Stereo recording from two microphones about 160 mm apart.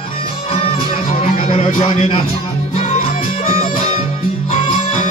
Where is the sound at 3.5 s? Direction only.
35° left (ahead or behind).